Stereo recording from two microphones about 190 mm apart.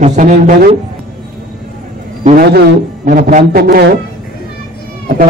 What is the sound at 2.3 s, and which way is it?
Speech, 50° right (ahead or behind).